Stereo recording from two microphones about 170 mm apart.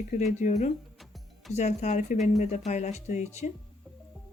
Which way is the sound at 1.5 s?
45° left (ahead or behind).